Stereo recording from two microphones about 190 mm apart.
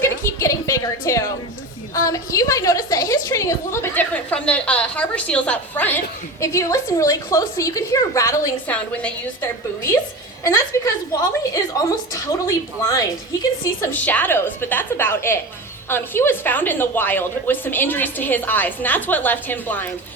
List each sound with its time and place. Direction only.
0.0 s a sound: 15° left (ahead or behind)
2.0 s a woman's voice: 15° left (ahead or behind)
13.9 s a woman's voice: 10° left (ahead or behind)